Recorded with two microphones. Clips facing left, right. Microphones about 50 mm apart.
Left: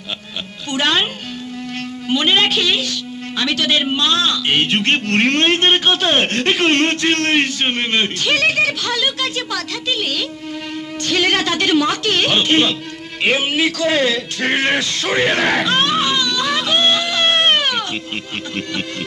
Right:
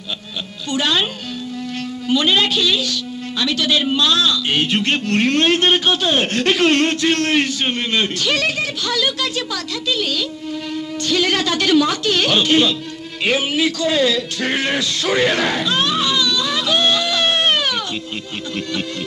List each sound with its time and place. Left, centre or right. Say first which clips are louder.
0.7 s a man's voice: left 1 dB; left
2.0 s a man's voice: left 1 dB; left
3.8 s a man's voice: even; left
5.5 s speech: left 1 dB; left
5.9 s a man's voice: left 1 dB; left
6.4 s speech: right 3 dB; left
6.9 s a man's voice: left 1 dB; left
11.0 s a man's voice: left 1 dB; left
14.0 s speech: even; left
15.4 s a sound: left 3 dB; left
16.6 s a sound: right 1 dB; left